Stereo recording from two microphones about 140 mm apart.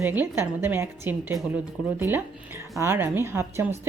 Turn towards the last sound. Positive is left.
turn(degrees=-20)  # may be behind; listen again after turning